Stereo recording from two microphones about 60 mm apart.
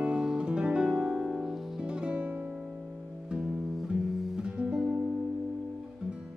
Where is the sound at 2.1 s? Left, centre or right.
Right.